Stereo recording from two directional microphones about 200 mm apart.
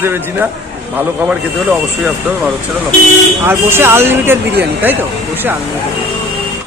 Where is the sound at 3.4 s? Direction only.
10° right (ahead or behind).